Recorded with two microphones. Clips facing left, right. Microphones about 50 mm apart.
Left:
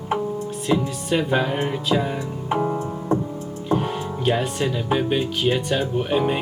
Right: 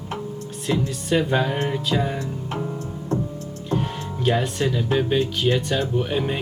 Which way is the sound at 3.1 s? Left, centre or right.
Centre.